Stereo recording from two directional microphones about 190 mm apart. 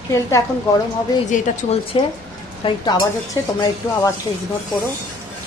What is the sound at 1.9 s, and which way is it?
Speech, 30° left (ahead or behind).